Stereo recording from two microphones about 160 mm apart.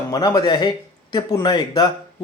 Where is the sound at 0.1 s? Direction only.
25° left (ahead or behind).